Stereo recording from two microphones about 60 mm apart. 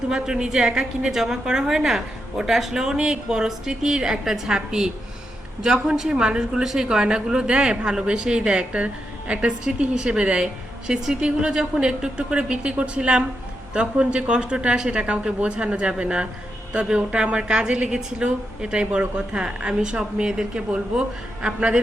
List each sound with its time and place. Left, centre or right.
0.1 s a woman's voice: centre